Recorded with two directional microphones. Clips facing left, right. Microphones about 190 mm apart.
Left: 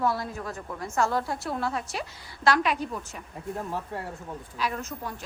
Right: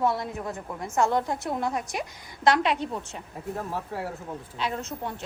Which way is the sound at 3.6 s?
Centre (ahead or behind).